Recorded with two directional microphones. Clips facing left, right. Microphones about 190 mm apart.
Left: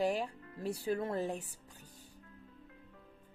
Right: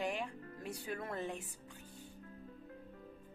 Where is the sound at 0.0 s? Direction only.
35° left (ahead or behind).